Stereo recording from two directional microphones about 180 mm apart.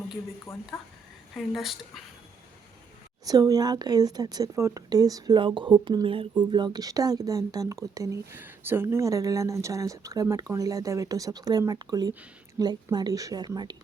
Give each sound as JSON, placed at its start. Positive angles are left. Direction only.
{"t": 0.5, "sound": "speech", "side_deg": 15}
{"t": 1.4, "sound": "speech", "side_deg": 0}
{"t": 3.2, "sound": "a woman's voice", "side_deg": -20}